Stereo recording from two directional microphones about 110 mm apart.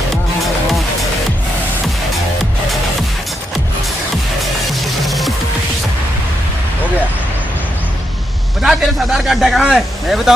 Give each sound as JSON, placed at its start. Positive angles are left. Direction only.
{"t": 5.0, "sound": "music", "side_deg": 0}
{"t": 8.6, "sound": "a man's voice", "side_deg": -5}